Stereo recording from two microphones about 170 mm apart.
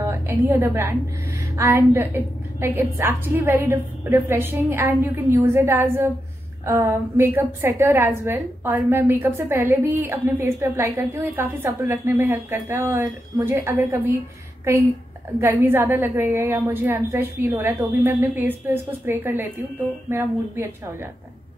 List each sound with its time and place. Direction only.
0.0 s a woman's voice: 15° right (ahead or behind)